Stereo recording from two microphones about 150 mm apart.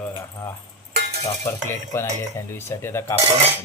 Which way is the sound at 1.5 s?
15° left (ahead or behind).